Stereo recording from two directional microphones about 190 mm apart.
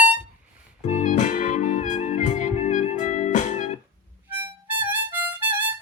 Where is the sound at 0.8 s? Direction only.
40° left (ahead or behind).